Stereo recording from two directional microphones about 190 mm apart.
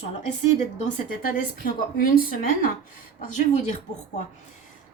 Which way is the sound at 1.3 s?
45° left (ahead or behind).